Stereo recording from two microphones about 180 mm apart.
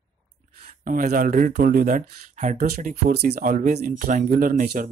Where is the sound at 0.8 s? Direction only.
50° right (ahead or behind).